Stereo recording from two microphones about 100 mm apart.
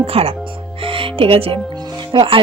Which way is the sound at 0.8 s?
65° right (ahead or behind).